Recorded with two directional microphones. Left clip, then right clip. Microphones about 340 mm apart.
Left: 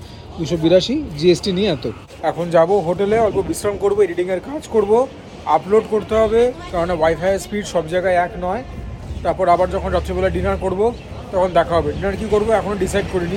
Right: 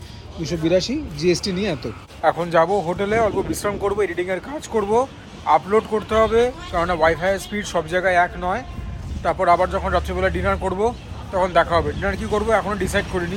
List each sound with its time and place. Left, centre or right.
0.5 s speech: centre